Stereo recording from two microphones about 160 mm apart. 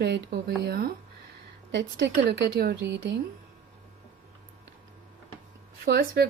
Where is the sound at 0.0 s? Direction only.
90° right.